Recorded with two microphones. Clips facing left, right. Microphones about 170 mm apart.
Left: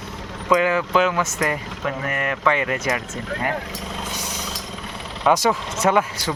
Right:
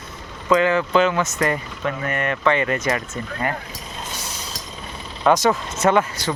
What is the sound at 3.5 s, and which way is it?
Speech, 90° left.